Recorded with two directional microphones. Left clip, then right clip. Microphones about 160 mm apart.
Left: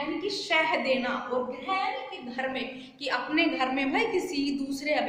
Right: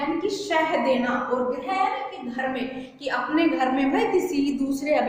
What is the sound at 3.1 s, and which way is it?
A woman's voice, 10° left (ahead or behind).